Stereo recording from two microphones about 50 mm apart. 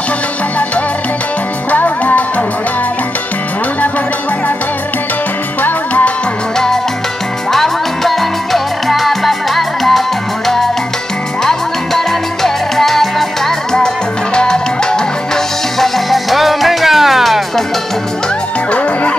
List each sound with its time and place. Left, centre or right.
1.7 s music: left
5.6 s music: left
7.5 s music: centre
11.4 s music: centre
14.3 s music: centre
15.8 s music: centre